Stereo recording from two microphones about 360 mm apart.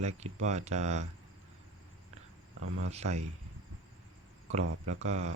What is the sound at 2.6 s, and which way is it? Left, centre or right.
Speech, right.